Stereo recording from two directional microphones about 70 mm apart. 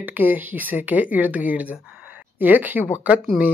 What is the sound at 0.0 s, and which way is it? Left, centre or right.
Speech, right.